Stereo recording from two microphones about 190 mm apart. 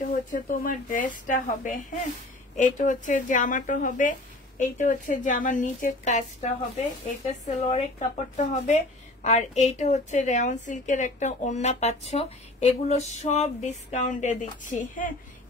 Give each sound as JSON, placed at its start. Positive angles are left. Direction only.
{"t": 0.1, "sound": "a woman's voice", "side_deg": 45}